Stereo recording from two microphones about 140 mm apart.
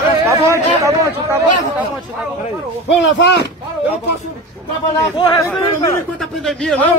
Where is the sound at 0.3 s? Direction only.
20° right (ahead or behind).